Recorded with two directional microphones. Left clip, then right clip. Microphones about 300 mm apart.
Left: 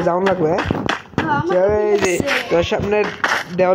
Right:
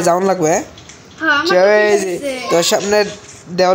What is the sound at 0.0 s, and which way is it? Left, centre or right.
Speech, centre.